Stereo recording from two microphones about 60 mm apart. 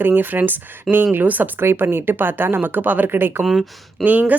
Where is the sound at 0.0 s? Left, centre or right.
Right.